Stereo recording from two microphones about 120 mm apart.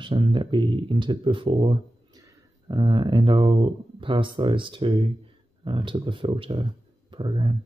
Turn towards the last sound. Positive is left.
turn(degrees=-45)  # may be behind; listen again after turning